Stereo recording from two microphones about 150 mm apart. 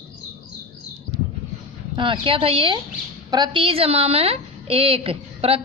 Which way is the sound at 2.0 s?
35° right (ahead or behind).